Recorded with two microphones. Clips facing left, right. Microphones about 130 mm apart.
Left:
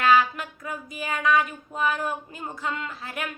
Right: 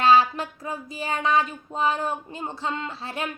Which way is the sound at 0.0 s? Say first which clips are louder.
Right 2 dB; 30° right (ahead or behind).